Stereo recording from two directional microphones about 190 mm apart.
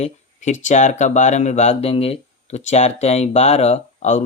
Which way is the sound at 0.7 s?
40° left (ahead or behind).